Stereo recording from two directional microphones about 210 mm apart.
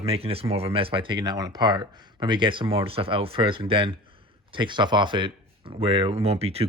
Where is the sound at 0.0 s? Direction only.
30° right (ahead or behind).